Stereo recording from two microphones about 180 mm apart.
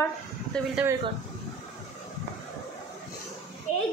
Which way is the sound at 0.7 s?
10° right (ahead or behind).